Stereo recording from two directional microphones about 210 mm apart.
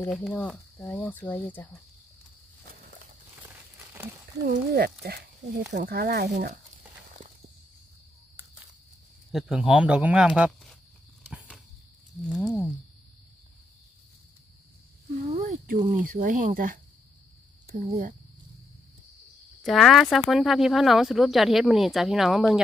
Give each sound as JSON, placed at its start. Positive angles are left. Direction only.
{"t": 0.0, "sound": "speech", "side_deg": 5}
{"t": 4.7, "sound": "speech", "side_deg": -50}
{"t": 9.3, "sound": "speech", "side_deg": 0}
{"t": 11.3, "sound": "a sound", "side_deg": -5}
{"t": 12.2, "sound": "speech", "side_deg": 0}
{"t": 15.2, "sound": "a sound", "side_deg": -35}
{"t": 16.0, "sound": "speech", "side_deg": -40}
{"t": 19.6, "sound": "speech", "side_deg": 0}